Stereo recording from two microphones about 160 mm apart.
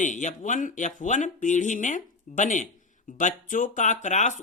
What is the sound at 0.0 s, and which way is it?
A woman's voice, 50° left (ahead or behind).